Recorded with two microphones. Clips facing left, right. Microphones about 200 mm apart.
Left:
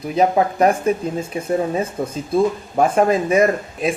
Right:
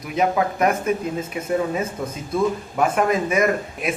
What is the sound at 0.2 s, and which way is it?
Speech, 35° left (ahead or behind).